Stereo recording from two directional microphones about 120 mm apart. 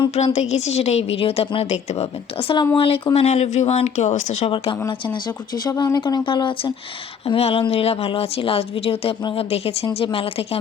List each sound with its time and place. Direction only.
0.3 s a woman's voice: 70° left (ahead or behind); by 3.2 s 50° left (ahead or behind)
3.2 s speech: 65° left (ahead or behind)
4.5 s speech: 45° left (ahead or behind)
7.3 s a woman's voice: 55° left (ahead or behind)